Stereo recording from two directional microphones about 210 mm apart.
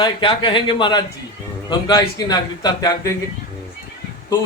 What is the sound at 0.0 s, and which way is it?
Speech, 25° left (ahead or behind).